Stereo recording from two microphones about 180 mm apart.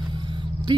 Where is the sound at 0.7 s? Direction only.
25° right (ahead or behind).